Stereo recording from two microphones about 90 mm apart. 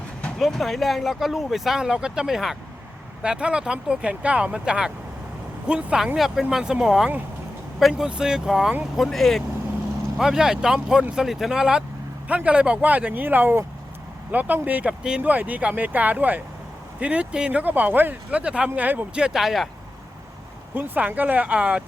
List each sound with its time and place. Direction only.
0.3 s speech: centre (ahead or behind)
20.7 s speech: 20° right (ahead or behind)